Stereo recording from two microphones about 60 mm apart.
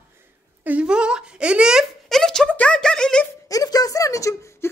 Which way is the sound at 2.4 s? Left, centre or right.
Left.